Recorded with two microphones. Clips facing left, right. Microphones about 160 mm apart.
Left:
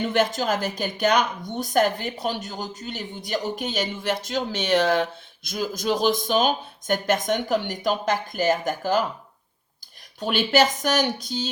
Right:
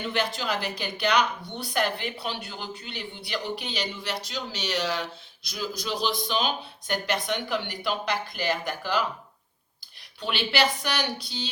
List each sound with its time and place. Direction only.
0.1 s speech: 45° left (ahead or behind)
10.2 s speech: 45° left (ahead or behind)